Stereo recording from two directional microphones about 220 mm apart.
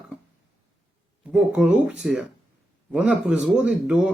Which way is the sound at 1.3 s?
5° right (ahead or behind).